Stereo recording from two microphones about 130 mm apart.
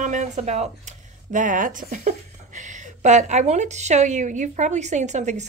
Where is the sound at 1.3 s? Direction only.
80° right.